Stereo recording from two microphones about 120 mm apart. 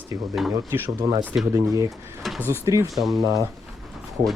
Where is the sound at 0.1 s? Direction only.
20° right (ahead or behind).